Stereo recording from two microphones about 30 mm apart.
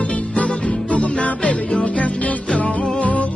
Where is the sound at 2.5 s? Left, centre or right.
Left.